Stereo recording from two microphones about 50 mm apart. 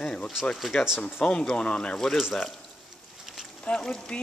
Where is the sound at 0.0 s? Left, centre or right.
Centre.